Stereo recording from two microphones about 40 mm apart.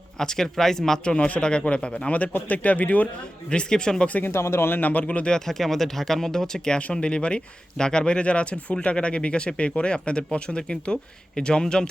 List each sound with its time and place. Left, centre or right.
0.2 s speech: centre
1.0 s speech: left
2.5 s speech: left
3.5 s speech: left
4.2 s speech: left
4.8 s speech: left
5.5 s speech: centre
6.9 s speech: left